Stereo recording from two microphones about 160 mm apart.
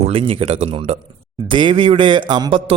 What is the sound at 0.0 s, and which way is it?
A man's voice, 35° right (ahead or behind).